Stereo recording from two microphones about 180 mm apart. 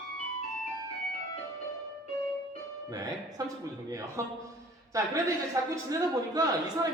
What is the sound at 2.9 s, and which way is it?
Speech, 20° right (ahead or behind).